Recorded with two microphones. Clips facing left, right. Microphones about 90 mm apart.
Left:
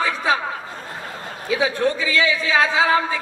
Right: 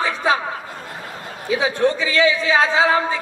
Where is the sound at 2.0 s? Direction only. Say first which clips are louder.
Right 3 dB; 30° right (ahead or behind).